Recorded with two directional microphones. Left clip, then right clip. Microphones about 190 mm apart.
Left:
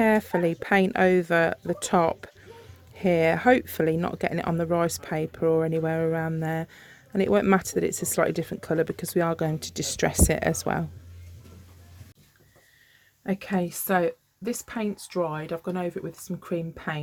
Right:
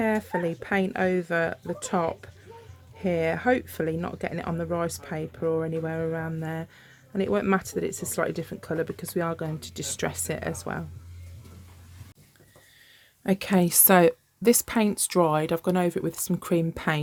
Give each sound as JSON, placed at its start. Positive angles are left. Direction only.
{"t": 0.0, "sound": "speech", "side_deg": 40}
{"t": 13.2, "sound": "speech", "side_deg": -40}